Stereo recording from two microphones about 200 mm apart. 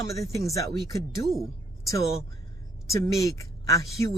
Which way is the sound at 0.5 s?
15° left (ahead or behind).